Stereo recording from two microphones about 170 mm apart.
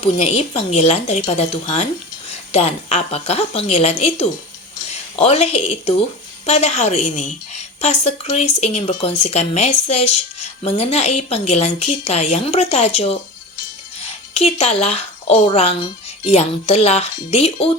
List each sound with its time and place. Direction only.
0.0 s a woman's voice: 40° left (ahead or behind)
2.5 s a woman's voice: 40° left (ahead or behind)
14.3 s a woman's voice: 40° left (ahead or behind)